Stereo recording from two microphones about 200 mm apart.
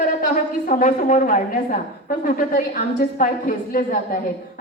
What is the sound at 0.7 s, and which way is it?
A woman's voice, 40° left (ahead or behind).